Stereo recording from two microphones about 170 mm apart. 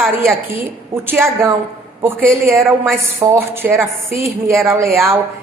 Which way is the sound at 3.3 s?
15° right (ahead or behind).